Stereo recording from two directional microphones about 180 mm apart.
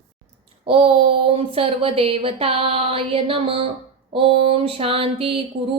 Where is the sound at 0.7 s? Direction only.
30° right (ahead or behind).